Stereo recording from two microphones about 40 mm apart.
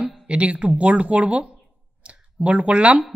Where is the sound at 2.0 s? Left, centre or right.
Right.